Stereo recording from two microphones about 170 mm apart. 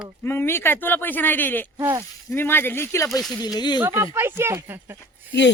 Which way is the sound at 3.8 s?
15° right (ahead or behind).